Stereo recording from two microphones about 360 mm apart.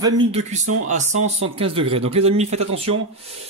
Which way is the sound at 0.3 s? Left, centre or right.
Centre.